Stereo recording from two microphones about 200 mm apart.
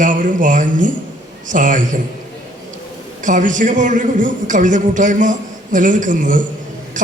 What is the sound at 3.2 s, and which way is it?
A man's voice, 40° right (ahead or behind).